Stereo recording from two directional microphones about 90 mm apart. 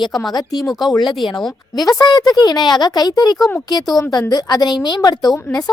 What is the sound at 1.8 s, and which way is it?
A woman's voice, 45° left (ahead or behind).